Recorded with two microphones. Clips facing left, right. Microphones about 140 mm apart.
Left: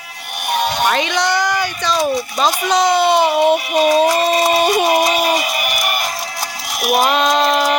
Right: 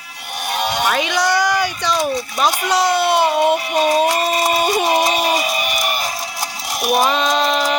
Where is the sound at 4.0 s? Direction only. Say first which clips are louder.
Left 3 dB; 30° left (ahead or behind).